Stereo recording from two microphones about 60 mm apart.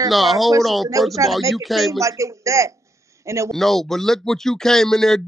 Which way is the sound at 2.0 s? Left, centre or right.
Right.